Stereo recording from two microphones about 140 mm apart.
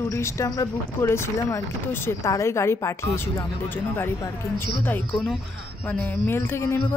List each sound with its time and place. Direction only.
0.1 s speech: 20° left (ahead or behind)
5.9 s speech: 15° left (ahead or behind)